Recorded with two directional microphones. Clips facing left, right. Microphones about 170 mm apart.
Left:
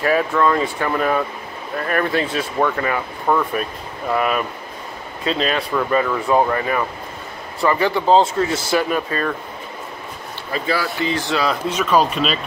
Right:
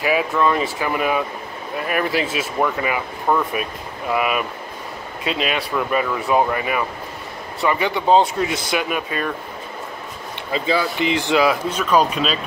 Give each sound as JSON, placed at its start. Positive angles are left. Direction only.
{"t": 0.0, "sound": "speech", "side_deg": -10}
{"t": 10.5, "sound": "speech", "side_deg": -20}
{"t": 11.9, "sound": "speech", "side_deg": 0}